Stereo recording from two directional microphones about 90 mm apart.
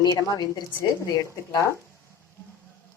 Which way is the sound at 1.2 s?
35° left (ahead or behind).